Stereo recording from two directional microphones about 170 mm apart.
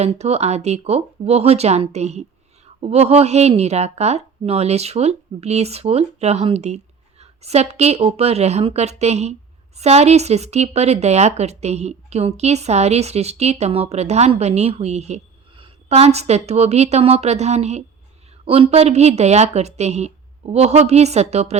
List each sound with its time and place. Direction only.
0.0 s speech: 40° right (ahead or behind)